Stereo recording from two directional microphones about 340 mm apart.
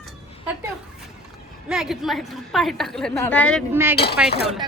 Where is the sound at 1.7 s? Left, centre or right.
Centre.